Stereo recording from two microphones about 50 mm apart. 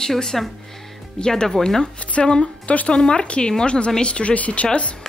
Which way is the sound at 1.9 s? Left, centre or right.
Left.